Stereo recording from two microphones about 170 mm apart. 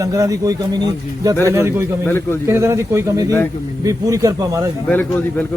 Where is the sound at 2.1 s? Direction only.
15° left (ahead or behind).